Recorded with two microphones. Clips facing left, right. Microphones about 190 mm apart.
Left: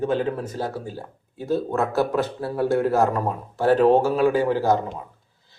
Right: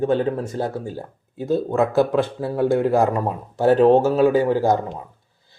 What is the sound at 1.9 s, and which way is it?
Speech, 15° right (ahead or behind).